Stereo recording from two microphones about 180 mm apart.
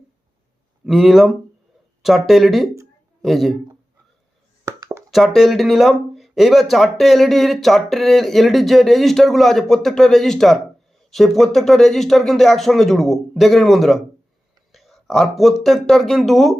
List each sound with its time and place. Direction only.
0.9 s a man's voice: centre (ahead or behind)
4.6 s plop: 15° right (ahead or behind)
5.1 s speech: centre (ahead or behind)